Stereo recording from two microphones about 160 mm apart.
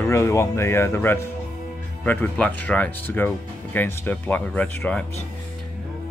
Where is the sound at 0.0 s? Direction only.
15° left (ahead or behind).